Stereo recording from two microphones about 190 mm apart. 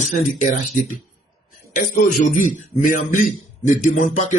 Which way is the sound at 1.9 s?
45° left (ahead or behind).